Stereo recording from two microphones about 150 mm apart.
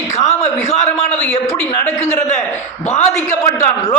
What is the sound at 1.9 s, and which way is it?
Speech, 15° left (ahead or behind).